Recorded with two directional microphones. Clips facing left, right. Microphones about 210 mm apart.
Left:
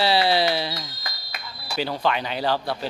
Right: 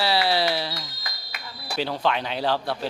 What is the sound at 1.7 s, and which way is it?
Speech, centre (ahead or behind).